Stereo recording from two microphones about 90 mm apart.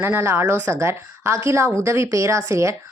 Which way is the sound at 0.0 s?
30° right (ahead or behind).